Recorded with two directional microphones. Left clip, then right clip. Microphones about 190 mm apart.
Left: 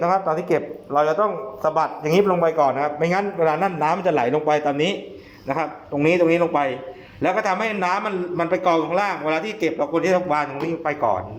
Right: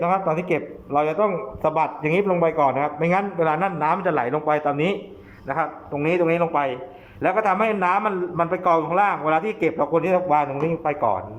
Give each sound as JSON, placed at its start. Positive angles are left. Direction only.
{"t": 0.0, "sound": "a man's voice", "side_deg": -10}
{"t": 3.6, "sound": "a man's voice", "side_deg": 0}
{"t": 7.3, "sound": "a man's voice", "side_deg": -10}
{"t": 9.0, "sound": "a man's voice", "side_deg": 0}